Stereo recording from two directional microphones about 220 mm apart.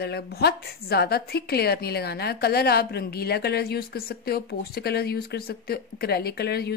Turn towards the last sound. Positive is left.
turn(degrees=45)  # may be behind; listen again after turning